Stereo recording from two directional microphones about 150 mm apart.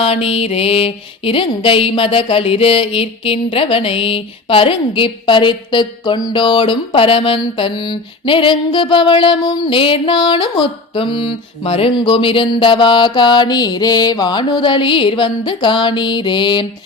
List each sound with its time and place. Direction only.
0.0 s music: 40° left (ahead or behind)